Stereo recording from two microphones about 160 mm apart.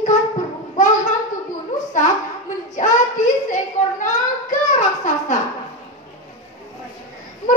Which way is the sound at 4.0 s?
50° left (ahead or behind).